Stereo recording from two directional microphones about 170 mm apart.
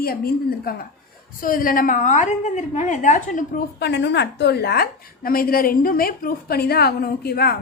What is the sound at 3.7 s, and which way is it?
A woman's voice, 85° left.